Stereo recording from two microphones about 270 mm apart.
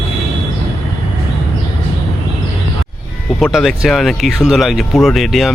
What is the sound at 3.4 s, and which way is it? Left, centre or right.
Speech, centre.